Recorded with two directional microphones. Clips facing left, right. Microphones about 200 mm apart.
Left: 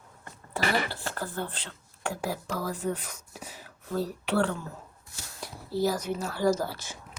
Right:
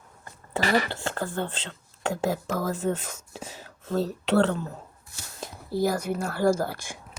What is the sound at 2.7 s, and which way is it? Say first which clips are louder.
Speech: right 4 dB; 25° right (ahead or behind).